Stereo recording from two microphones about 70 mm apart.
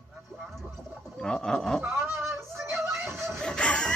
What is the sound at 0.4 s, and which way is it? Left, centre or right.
Gargling, centre.